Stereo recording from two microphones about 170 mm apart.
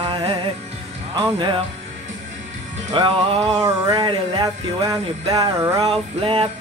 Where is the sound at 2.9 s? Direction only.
30° right (ahead or behind).